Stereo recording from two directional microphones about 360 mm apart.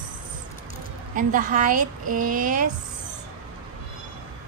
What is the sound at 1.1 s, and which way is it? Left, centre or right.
A woman's voice, right.